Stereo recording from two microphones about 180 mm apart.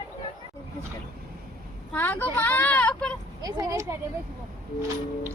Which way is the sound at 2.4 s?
10° left (ahead or behind).